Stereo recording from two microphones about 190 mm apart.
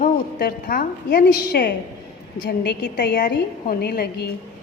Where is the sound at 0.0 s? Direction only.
50° left (ahead or behind).